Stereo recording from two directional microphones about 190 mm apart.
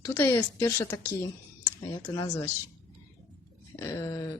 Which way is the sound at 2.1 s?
20° left (ahead or behind).